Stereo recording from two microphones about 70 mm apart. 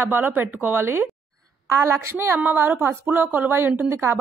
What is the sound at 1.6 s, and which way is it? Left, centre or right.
Speech, right.